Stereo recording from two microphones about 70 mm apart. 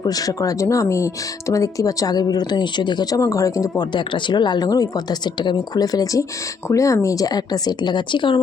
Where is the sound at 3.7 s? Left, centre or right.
Left.